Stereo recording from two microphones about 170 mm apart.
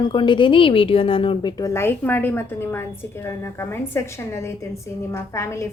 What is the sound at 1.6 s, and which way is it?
A woman's voice, 15° left (ahead or behind).